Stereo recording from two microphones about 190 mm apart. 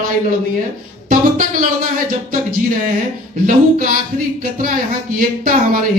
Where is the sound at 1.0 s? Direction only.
45° right (ahead or behind).